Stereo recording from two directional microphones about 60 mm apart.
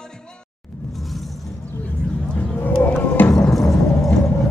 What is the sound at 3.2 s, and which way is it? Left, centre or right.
Music, left.